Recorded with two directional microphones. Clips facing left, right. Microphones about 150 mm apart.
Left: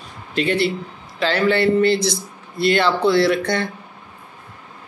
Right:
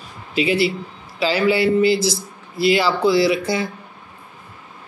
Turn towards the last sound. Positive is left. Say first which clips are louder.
# even
turn(degrees=-5)  # may be behind; listen again after turning